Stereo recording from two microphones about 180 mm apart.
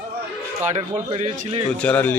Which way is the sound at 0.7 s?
40° right (ahead or behind).